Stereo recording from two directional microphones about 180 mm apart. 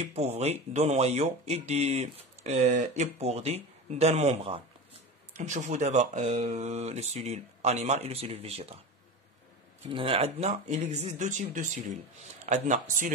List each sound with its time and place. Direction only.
0.0 s speech: 35° right (ahead or behind)
9.8 s speech: 30° right (ahead or behind)